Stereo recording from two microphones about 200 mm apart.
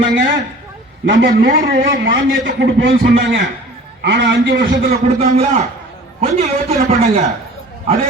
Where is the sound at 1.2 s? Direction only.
45° right (ahead or behind).